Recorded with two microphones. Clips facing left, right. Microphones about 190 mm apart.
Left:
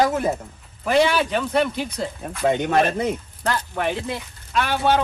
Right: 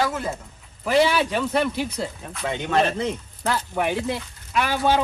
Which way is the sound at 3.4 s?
5° right (ahead or behind).